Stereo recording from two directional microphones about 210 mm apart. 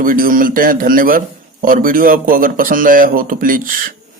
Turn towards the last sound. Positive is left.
turn(degrees=-40)  # may be behind; listen again after turning